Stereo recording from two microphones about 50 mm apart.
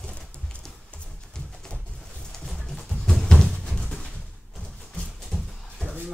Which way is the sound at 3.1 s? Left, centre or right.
Centre.